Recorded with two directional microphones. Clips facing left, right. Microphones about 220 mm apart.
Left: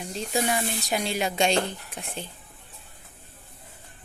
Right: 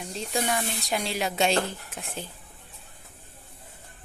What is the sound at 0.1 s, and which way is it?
Speech, centre (ahead or behind).